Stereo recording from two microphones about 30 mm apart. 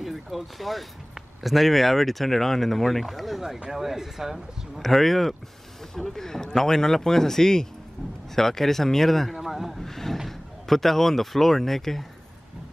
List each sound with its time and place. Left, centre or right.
0.0 s a sound: centre
0.4 s speech: centre
3.4 s speech: right
3.7 s speech: centre
4.7 s speech: centre
5.9 s speech: centre
9.4 s a sound: centre
9.8 s a sound: centre
10.1 s speech: centre